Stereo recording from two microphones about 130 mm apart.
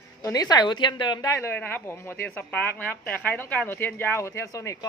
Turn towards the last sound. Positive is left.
turn(degrees=25)  # may be behind; listen again after turning